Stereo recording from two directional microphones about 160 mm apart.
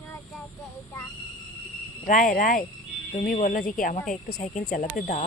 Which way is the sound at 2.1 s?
55° left (ahead or behind).